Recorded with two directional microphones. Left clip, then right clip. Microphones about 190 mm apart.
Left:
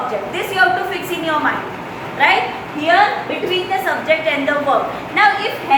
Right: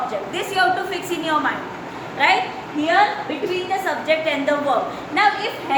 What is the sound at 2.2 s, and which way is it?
Speech, 25° right (ahead or behind).